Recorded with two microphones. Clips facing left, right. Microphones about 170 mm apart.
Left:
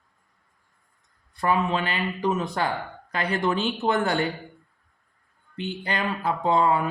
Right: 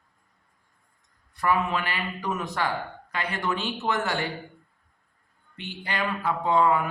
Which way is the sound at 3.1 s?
35° left (ahead or behind).